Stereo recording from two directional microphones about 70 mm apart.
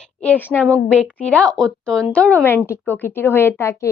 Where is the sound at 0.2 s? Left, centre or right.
Left.